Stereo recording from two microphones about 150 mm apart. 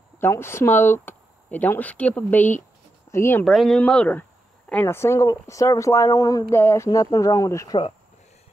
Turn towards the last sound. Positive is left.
turn(degrees=25)  # may be behind; listen again after turning